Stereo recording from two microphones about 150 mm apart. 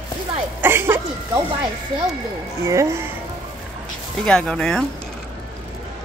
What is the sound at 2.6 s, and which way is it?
Speech, 20° right (ahead or behind).